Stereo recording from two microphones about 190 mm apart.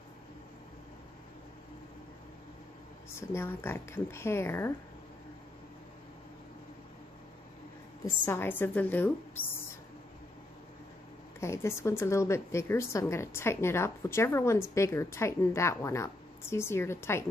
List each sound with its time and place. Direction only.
3.2 s a woman's voice: 10° left (ahead or behind)
8.0 s a woman's voice: 10° left (ahead or behind)
11.3 s a woman's voice: 15° left (ahead or behind)